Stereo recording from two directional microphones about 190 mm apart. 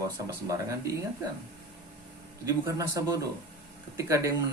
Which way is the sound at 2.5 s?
15° right (ahead or behind).